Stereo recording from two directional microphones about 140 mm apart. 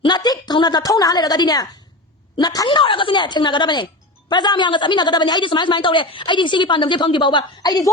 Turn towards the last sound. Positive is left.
turn(degrees=30)  # may be behind; listen again after turning